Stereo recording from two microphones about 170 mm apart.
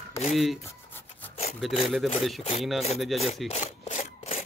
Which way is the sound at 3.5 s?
45° left (ahead or behind).